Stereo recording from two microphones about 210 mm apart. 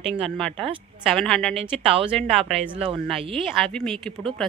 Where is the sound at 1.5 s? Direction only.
30° right (ahead or behind).